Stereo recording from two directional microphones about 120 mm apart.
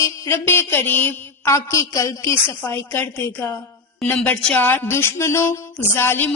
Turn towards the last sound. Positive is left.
turn(degrees=20)  # may be behind; listen again after turning